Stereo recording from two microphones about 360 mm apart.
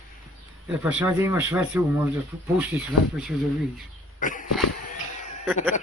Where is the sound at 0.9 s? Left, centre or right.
Centre.